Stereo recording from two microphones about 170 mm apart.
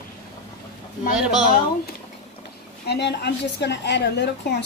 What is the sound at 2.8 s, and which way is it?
A woman's voice, 80° left.